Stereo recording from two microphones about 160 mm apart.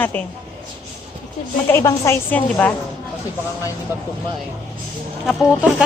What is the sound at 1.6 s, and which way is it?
A woman's voice, 20° left (ahead or behind).